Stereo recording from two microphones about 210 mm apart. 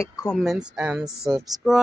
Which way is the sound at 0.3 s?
5° right (ahead or behind).